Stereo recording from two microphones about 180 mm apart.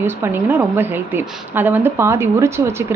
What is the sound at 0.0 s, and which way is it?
A woman's voice, 10° right (ahead or behind).